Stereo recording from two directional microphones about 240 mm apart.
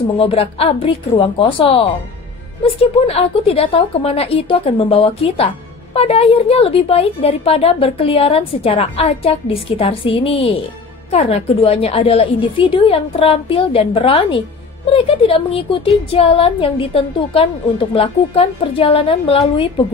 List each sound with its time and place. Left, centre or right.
0.2 s a woman's voice: left